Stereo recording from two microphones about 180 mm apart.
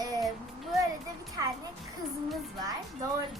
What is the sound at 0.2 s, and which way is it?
Child singing, centre (ahead or behind).